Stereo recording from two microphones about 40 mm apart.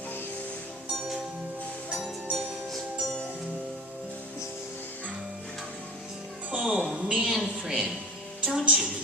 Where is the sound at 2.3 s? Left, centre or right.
Centre.